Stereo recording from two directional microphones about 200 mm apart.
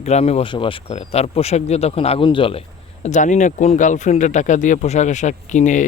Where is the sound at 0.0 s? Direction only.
35° left (ahead or behind).